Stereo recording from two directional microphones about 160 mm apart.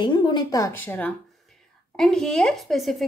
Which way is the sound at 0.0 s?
30° left (ahead or behind).